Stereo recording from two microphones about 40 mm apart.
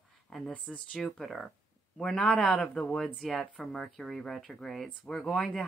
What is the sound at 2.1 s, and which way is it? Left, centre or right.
Speech, centre.